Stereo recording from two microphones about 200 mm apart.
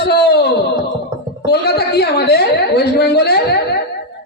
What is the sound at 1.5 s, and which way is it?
A woman's voice, 55° left (ahead or behind).